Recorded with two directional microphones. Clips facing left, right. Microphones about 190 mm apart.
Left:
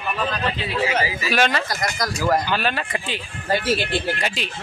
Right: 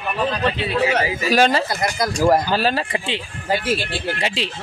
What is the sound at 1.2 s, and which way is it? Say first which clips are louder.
Speech: right 6 dB; 35° right (ahead or behind).